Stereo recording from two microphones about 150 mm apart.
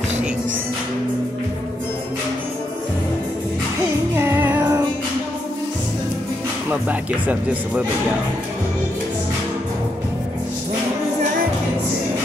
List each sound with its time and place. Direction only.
4.2 s music: 15° right (ahead or behind)
6.7 s speech: 10° right (ahead or behind)